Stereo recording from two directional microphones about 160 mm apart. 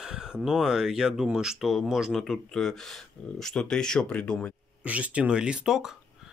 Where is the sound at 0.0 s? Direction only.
5° right (ahead or behind).